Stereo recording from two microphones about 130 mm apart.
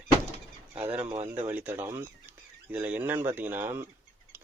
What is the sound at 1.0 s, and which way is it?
Speech, 50° right (ahead or behind).